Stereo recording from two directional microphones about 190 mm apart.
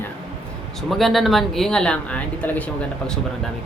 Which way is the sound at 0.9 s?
Centre (ahead or behind).